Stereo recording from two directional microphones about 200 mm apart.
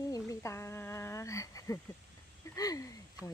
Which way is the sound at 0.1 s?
15° left (ahead or behind).